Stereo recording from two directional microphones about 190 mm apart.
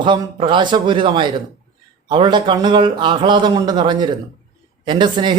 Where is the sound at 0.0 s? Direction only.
25° right (ahead or behind).